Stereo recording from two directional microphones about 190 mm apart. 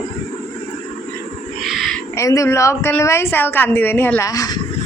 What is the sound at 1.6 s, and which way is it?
Owl, centre (ahead or behind).